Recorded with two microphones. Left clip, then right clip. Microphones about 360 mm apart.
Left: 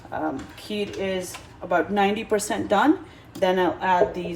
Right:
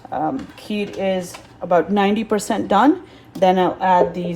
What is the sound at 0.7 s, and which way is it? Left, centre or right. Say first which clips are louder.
Speech: right 6 dB; right.